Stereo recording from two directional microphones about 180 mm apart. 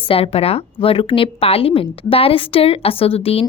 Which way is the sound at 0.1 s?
35° left (ahead or behind).